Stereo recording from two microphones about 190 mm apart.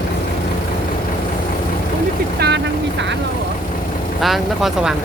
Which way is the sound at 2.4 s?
60° right (ahead or behind).